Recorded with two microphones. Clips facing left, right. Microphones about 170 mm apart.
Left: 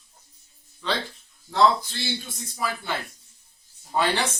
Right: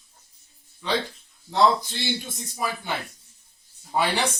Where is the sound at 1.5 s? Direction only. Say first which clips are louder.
Even; 20° right (ahead or behind).